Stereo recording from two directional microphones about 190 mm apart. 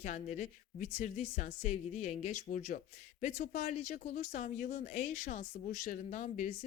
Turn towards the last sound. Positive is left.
turn(degrees=45)  # may be behind; listen again after turning